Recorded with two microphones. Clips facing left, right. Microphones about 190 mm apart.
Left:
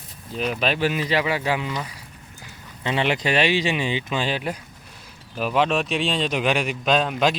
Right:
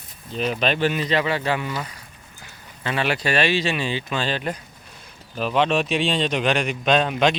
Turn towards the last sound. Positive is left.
turn(degrees=0)  # may be behind; listen again after turning